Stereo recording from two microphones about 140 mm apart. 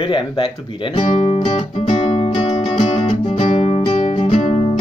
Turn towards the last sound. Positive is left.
turn(degrees=45)  # may be behind; listen again after turning